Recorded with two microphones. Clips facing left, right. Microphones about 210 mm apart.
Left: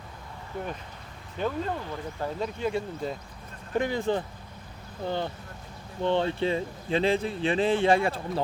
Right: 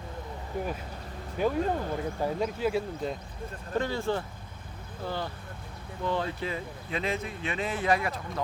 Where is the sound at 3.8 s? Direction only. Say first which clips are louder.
Left 3 dB; 15° left (ahead or behind).